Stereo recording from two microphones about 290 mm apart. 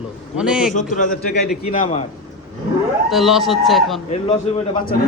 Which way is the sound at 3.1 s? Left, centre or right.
Centre.